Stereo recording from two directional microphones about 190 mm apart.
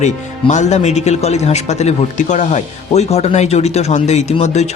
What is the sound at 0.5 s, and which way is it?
Speech, 35° left (ahead or behind).